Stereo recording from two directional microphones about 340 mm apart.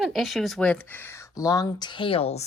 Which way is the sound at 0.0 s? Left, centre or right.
Centre.